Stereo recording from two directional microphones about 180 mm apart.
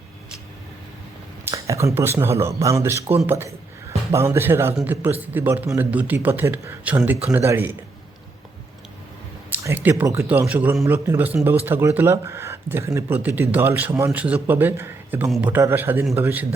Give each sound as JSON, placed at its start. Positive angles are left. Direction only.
{"t": 1.5, "sound": "speech", "side_deg": -15}
{"t": 9.5, "sound": "speech", "side_deg": -10}